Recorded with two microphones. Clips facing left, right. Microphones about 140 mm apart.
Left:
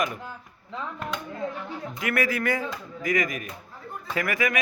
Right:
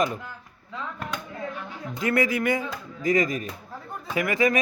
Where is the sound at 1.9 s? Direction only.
25° right (ahead or behind).